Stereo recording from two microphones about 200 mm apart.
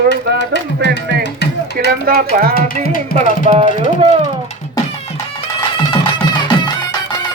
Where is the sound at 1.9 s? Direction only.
45° right (ahead or behind).